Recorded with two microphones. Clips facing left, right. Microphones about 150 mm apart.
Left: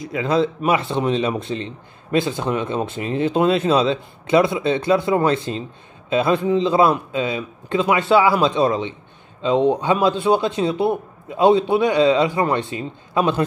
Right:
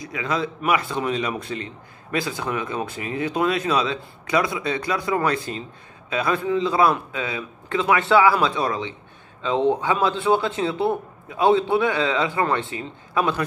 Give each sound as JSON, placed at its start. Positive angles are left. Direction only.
{"t": 0.2, "sound": "a man's voice", "side_deg": 30}